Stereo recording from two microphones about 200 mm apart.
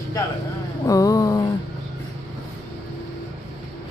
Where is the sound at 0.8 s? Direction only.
15° left (ahead or behind).